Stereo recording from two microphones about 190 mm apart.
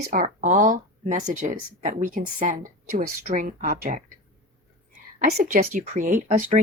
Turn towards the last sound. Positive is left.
turn(degrees=-45)  # may be behind; listen again after turning